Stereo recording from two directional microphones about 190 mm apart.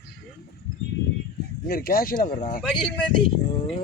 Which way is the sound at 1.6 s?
50° left (ahead or behind).